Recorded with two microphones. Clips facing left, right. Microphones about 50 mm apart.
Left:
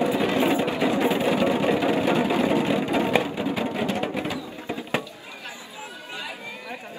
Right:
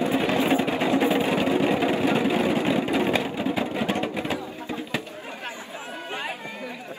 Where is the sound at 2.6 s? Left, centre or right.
Right.